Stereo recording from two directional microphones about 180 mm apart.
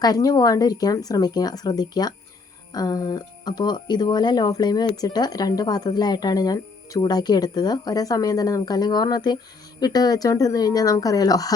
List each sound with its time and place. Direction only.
0.0 s speech: 20° left (ahead or behind)